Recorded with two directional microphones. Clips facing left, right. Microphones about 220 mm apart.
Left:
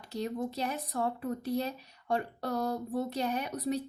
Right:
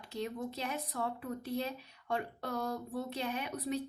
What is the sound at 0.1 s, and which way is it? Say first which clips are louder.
Speech: left 4 dB; 40° left (ahead or behind).